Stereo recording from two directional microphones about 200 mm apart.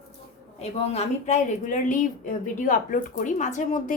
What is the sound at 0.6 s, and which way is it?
A woman's voice, 30° left (ahead or behind).